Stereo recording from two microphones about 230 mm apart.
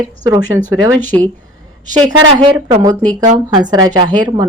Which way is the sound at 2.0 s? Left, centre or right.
Right.